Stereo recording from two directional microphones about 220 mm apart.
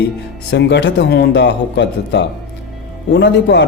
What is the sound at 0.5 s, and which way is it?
A man's voice, 55° left (ahead or behind).